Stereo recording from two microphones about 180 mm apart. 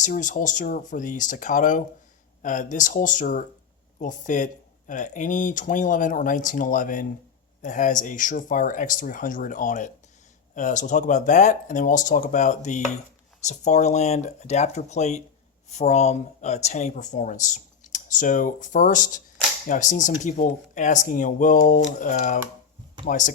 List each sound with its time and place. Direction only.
0.0 s speech: 45° left (ahead or behind)